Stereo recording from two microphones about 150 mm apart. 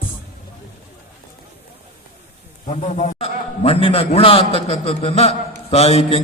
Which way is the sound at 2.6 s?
50° left (ahead or behind).